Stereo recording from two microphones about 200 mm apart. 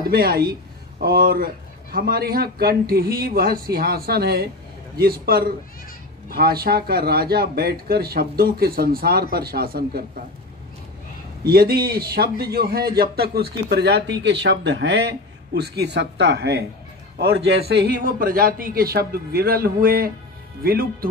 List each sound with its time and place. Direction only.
0.1 s a man's voice: 50° right (ahead or behind)
11.4 s a man's voice: 50° right (ahead or behind)
17.6 s a man's voice: 55° right (ahead or behind)